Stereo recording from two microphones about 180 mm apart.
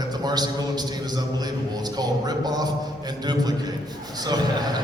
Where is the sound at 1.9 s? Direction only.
20° right (ahead or behind).